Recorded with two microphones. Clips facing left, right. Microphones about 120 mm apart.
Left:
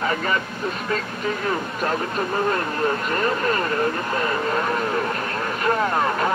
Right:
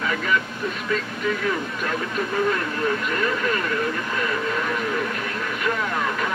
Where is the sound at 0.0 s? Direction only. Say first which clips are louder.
Left 1 dB; 40° left (ahead or behind).